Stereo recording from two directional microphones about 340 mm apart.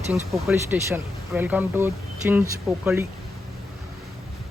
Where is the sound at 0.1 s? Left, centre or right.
Centre.